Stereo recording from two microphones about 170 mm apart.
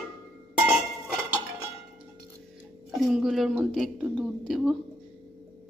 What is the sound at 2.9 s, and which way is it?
A woman's voice, centre (ahead or behind).